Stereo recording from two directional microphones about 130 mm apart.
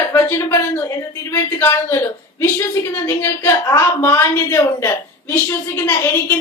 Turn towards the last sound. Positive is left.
turn(degrees=20)  # may be behind; listen again after turning